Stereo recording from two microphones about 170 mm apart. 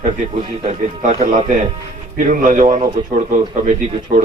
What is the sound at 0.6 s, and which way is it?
Speech, 40° right (ahead or behind).